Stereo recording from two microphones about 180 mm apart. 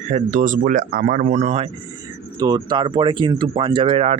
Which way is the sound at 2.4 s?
20° right (ahead or behind).